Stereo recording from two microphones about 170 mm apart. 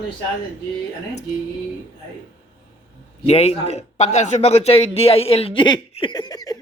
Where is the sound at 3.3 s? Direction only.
40° left (ahead or behind).